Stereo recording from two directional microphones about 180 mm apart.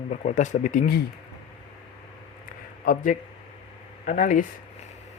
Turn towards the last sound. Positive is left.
turn(degrees=50)  # may be behind; listen again after turning